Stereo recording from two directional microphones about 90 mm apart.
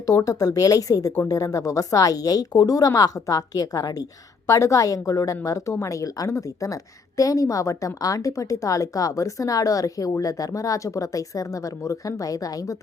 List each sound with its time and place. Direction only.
0.3 s a woman's voice: 40° left (ahead or behind)